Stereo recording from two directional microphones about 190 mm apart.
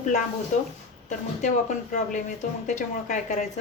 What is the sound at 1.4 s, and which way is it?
Speech, 40° left (ahead or behind).